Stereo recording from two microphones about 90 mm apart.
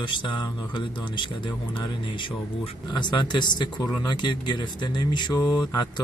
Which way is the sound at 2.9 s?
55° left (ahead or behind).